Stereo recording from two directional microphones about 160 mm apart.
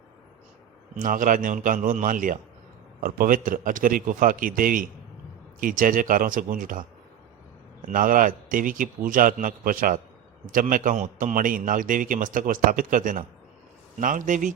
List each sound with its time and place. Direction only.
0.9 s a man's voice: 55° right (ahead or behind)
7.9 s a man's voice: 60° right (ahead or behind)